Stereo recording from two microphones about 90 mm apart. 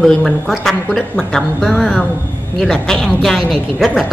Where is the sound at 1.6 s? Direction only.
5° right (ahead or behind).